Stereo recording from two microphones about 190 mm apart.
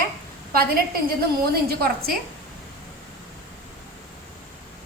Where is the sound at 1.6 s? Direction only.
55° right (ahead or behind).